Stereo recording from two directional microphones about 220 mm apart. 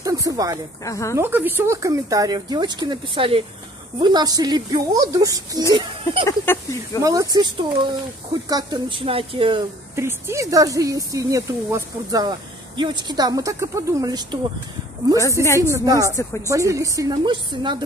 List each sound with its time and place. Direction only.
0.0 s a sound: 15° right (ahead or behind)
0.8 s speech: 15° left (ahead or behind)
1.1 s a woman's voice: 10° right (ahead or behind)
6.2 s speech: 10° left (ahead or behind)
7.0 s a woman's voice: 15° right (ahead or behind)
15.4 s speech: 15° left (ahead or behind)
15.7 s a woman's voice: 15° right (ahead or behind)